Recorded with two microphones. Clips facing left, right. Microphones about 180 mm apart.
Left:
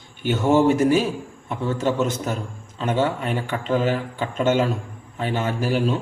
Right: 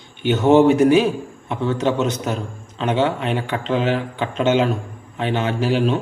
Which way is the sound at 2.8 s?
70° right (ahead or behind).